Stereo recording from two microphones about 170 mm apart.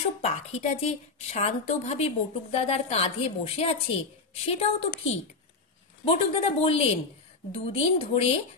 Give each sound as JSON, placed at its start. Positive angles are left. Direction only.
{"t": 0.2, "sound": "a woman's voice", "side_deg": 40}